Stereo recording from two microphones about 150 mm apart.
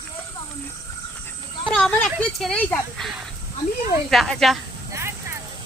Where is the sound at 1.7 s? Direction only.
10° left (ahead or behind).